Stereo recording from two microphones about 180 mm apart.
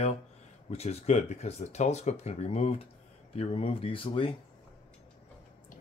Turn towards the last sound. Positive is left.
turn(degrees=30)  # may be behind; listen again after turning